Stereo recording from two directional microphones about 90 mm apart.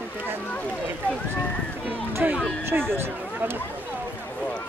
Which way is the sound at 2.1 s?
25° right (ahead or behind).